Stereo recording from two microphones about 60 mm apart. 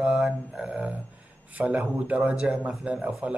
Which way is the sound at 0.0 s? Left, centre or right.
Centre.